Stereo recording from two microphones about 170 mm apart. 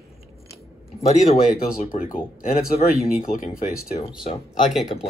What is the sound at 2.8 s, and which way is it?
Speech, 55° left (ahead or behind).